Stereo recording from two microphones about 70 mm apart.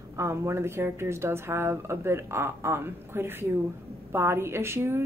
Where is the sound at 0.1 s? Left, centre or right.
Right.